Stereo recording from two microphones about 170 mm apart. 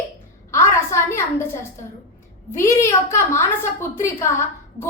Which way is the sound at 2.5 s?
15° left (ahead or behind).